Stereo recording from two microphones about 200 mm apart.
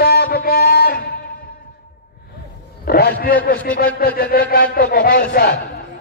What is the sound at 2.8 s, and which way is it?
A man's voice, 50° left (ahead or behind).